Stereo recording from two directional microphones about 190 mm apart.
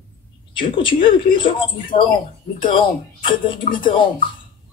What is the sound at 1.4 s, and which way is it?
Speech, 25° left (ahead or behind).